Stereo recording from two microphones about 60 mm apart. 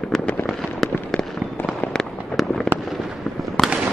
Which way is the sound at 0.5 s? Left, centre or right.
Centre.